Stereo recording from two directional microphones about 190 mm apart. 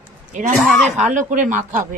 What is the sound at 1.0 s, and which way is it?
Speech, 40° right (ahead or behind).